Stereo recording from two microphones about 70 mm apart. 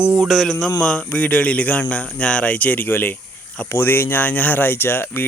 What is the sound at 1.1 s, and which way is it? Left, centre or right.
Speech, left.